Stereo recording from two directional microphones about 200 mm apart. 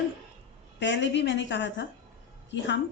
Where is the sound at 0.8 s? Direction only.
65° left (ahead or behind).